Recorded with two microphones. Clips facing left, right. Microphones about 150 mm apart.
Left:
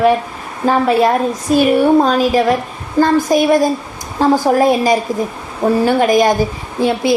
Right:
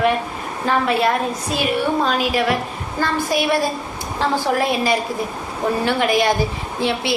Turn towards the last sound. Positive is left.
turn(degrees=45)  # may be behind; listen again after turning